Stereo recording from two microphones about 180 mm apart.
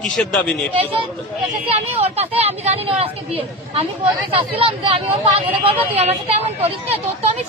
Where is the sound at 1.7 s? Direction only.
35° right (ahead or behind).